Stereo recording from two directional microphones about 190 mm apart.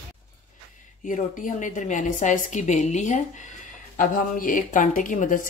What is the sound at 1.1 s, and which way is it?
A woman's voice, 45° left (ahead or behind).